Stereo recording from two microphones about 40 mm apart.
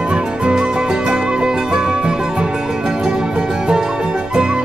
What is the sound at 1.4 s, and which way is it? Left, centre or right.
Music, right.